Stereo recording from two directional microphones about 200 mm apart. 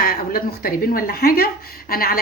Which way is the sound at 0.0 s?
45° left (ahead or behind).